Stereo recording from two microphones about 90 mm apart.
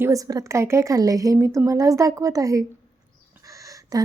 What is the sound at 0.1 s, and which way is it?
A woman's voice, 40° right (ahead or behind).